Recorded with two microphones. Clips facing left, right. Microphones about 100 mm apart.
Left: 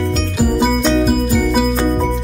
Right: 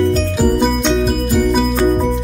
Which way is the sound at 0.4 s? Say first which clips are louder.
Left 1 dB; centre (ahead or behind).